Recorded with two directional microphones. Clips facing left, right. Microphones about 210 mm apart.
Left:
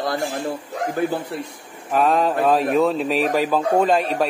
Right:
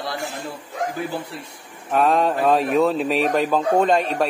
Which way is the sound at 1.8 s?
Centre (ahead or behind).